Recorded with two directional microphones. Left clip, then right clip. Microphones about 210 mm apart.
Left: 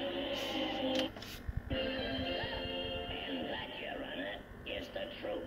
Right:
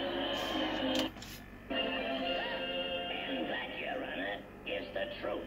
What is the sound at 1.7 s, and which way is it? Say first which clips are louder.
Music: right 3 dB; centre (ahead or behind).